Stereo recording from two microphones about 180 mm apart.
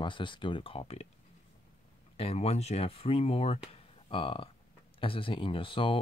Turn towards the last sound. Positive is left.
turn(degrees=30)  # may be behind; listen again after turning